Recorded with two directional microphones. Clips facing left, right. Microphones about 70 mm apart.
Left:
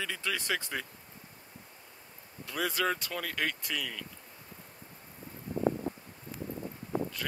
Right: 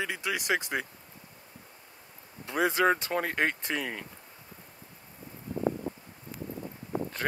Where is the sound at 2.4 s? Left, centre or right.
Right.